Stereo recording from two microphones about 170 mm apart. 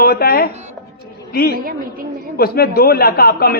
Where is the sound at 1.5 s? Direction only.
60° right (ahead or behind).